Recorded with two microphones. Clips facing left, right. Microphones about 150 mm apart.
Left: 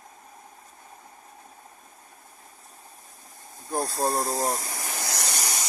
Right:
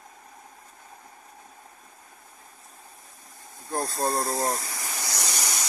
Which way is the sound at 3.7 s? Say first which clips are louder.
Left 1 dB; centre (ahead or behind).